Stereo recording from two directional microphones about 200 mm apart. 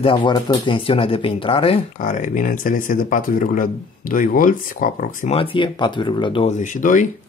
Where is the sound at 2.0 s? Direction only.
40° left (ahead or behind).